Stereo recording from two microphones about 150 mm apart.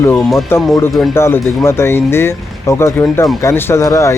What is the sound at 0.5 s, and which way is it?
Speech, 15° left (ahead or behind).